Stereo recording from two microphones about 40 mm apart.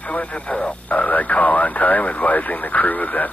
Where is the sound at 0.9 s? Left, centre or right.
Left.